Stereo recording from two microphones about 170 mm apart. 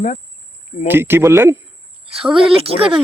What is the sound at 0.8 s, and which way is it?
Speech, 15° right (ahead or behind).